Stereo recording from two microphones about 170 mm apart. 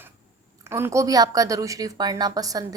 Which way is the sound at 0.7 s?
15° right (ahead or behind).